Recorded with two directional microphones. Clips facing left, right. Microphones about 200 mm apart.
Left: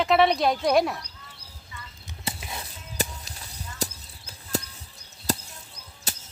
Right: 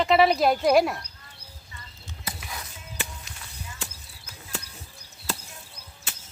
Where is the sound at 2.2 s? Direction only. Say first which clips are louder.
Left 3 dB; 25° left (ahead or behind).